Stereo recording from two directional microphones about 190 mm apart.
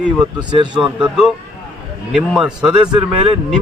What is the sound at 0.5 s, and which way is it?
Speech, 25° right (ahead or behind).